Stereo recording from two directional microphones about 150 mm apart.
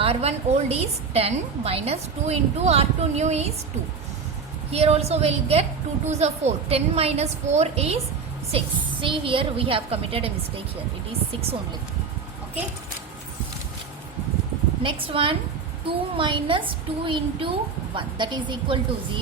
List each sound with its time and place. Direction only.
0.0 s a woman's voice: 40° right (ahead or behind)
4.7 s a woman's voice: 45° right (ahead or behind)
14.8 s a woman's voice: 35° right (ahead or behind)